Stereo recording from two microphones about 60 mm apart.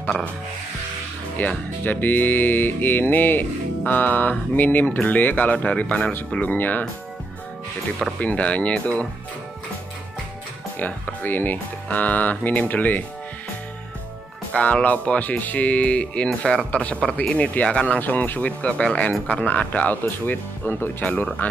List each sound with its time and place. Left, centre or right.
1.4 s speech: left
8.2 s speech: left
10.8 s speech: left
14.5 s speech: left
17.9 s speech: left